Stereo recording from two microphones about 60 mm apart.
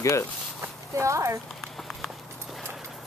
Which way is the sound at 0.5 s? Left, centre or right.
Right.